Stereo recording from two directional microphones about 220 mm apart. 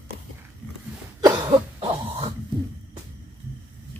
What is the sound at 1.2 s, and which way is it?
Cough, 20° right (ahead or behind).